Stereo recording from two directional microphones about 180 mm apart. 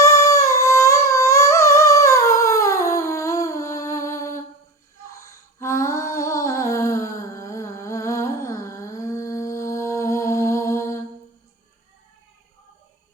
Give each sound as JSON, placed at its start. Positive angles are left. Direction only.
{"t": 0.0, "sound": "humming", "side_deg": 15}
{"t": 5.5, "sound": "music", "side_deg": 15}